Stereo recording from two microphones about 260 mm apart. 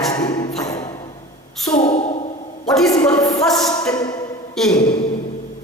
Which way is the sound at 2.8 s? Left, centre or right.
Centre.